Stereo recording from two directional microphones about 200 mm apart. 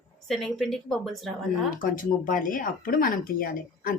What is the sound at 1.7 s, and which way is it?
Speech, 40° left (ahead or behind).